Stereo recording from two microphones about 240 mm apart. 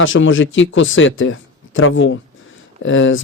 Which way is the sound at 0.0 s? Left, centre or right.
Left.